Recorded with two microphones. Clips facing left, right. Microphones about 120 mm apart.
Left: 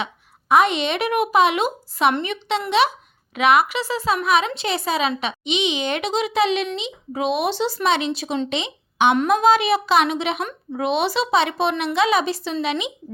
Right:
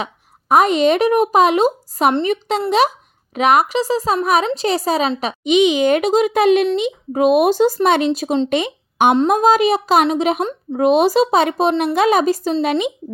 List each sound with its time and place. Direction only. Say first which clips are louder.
0.0 s a woman's voice: right 2 dB; 40° right (ahead or behind)
11.9 s speech: right 3 dB; 45° right (ahead or behind)